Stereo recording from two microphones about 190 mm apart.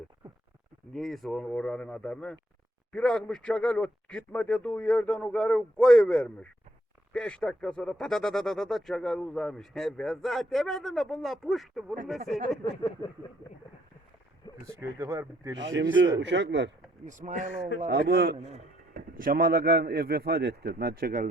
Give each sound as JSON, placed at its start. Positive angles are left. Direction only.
{"t": 0.9, "sound": "speech", "side_deg": 0}
{"t": 13.0, "sound": "speech", "side_deg": 20}
{"t": 14.7, "sound": "speech", "side_deg": -15}
{"t": 15.5, "sound": "speech", "side_deg": -70}
{"t": 17.1, "sound": "speech", "side_deg": -40}
{"t": 17.9, "sound": "a man's voice", "side_deg": -60}
{"t": 18.3, "sound": "speech", "side_deg": -35}